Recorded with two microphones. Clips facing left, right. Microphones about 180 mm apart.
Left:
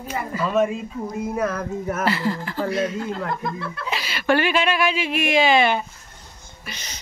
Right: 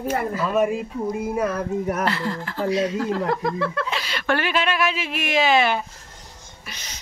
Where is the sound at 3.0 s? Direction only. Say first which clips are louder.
Right 4 dB; 85° right.